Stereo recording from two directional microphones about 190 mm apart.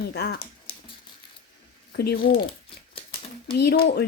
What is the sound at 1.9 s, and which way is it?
Speech, 55° left (ahead or behind).